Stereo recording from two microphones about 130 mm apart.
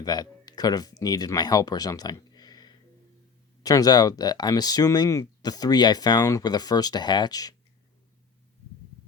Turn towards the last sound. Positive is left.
turn(degrees=30)  # may be behind; listen again after turning